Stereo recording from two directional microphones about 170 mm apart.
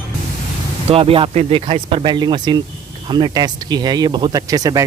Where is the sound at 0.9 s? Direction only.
35° right (ahead or behind).